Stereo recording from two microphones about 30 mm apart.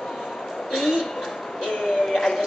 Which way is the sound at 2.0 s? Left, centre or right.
Centre.